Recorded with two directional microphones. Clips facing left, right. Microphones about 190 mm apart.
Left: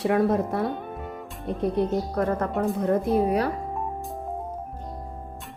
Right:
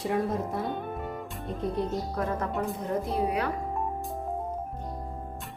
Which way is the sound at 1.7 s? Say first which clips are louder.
Left 6 dB; 60° left (ahead or behind).